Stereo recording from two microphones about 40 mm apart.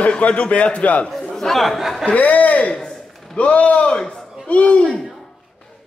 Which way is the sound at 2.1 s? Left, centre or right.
Left.